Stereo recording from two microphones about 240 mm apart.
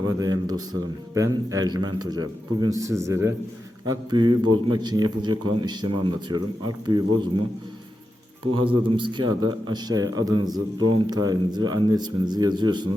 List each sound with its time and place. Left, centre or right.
0.0 s speech: centre
8.5 s speech: right